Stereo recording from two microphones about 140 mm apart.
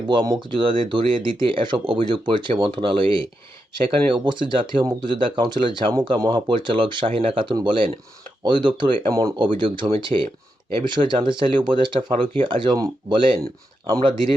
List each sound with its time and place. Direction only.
0.1 s speech: 35° right (ahead or behind)